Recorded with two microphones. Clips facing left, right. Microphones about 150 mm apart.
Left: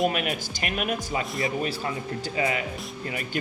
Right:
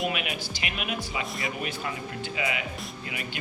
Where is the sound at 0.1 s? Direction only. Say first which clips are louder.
Left 3 dB; 45° left (ahead or behind).